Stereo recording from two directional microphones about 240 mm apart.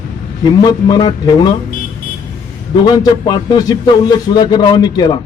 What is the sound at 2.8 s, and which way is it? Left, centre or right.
A man's voice, centre.